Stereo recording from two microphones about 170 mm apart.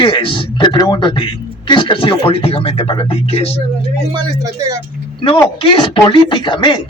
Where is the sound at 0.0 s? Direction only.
30° left (ahead or behind).